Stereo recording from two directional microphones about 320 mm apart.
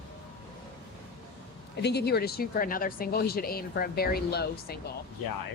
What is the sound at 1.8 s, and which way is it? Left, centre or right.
Speech, left.